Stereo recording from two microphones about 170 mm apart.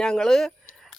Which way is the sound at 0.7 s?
Centre (ahead or behind).